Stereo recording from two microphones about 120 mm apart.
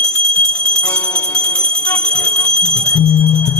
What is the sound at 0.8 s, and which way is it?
Jingle bell, 10° left (ahead or behind).